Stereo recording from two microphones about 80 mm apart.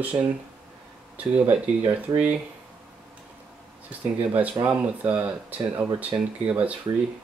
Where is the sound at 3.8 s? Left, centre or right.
Centre.